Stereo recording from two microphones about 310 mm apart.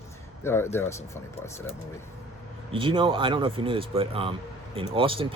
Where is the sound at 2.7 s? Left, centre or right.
Centre.